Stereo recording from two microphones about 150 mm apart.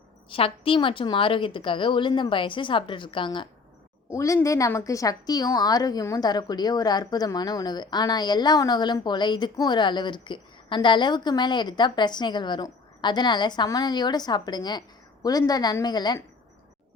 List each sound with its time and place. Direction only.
0.3 s a woman's voice: 35° left (ahead or behind)
4.1 s a woman's voice: 20° left (ahead or behind)